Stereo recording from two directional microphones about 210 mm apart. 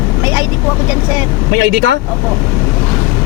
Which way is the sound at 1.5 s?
55° right (ahead or behind).